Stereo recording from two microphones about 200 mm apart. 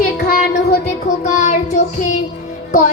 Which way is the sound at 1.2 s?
40° left (ahead or behind).